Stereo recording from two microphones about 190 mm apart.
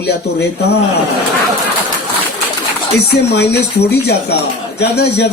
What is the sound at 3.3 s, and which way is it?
Speech, 60° left (ahead or behind).